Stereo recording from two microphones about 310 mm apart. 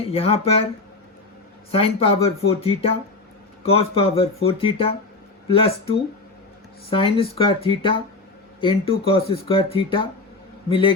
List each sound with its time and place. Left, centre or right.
0.1 s speech: centre
1.7 s speech: centre
6.9 s speech: centre